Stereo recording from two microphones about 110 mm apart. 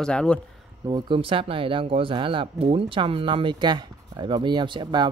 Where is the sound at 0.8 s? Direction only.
45° right (ahead or behind).